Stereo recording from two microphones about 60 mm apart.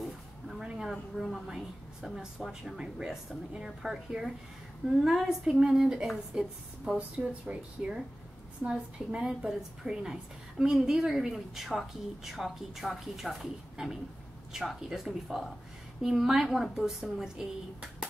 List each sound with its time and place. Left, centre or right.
0.0 s speech: centre
7.0 s a woman's voice: right